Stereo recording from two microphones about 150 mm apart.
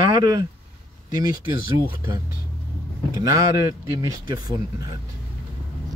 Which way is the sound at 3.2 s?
25° right (ahead or behind).